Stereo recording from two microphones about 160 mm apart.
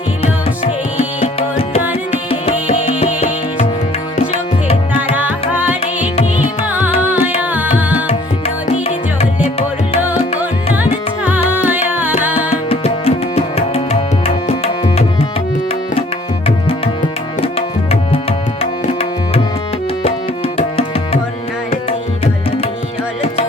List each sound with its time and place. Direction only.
1.2 s music: 40° left (ahead or behind)
5.1 s music: 10° right (ahead or behind)
8.0 s music: 40° left (ahead or behind)
11.3 s music: 10° right (ahead or behind)
12.6 s tabla: 35° left (ahead or behind)
18.1 s tabla: 35° left (ahead or behind)
20.6 s tabla: 40° left (ahead or behind)